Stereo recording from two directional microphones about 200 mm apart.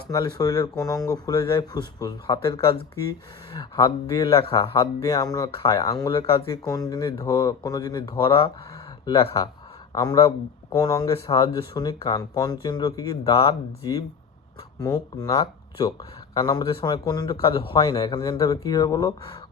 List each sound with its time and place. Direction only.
0.1 s speech: 20° left (ahead or behind)